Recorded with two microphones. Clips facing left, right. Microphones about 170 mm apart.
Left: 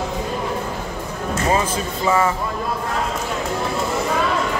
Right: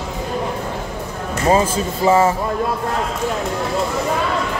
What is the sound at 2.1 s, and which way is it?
Speech, 30° right (ahead or behind).